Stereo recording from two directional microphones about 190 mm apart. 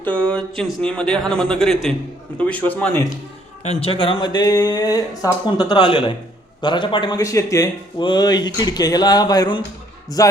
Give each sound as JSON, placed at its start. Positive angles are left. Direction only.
{"t": 0.0, "sound": "a man's voice", "side_deg": 5}
{"t": 3.6, "sound": "speech", "side_deg": 35}
{"t": 10.2, "sound": "music", "side_deg": 20}